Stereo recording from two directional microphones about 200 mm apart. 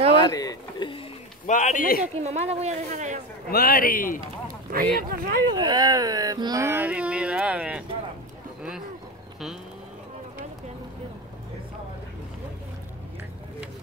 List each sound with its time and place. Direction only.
0.2 s a sound: 20° left (ahead or behind)
1.5 s a man's voice: 40° left (ahead or behind)
2.2 s a woman's voice: 30° right (ahead or behind)
3.4 s a man's voice: 50° left (ahead or behind)
4.5 s a sound: 45° right (ahead or behind)
4.9 s speech: 45° right (ahead or behind)
5.5 s speech: 20° right (ahead or behind); by 7.8 s 5° right (ahead or behind)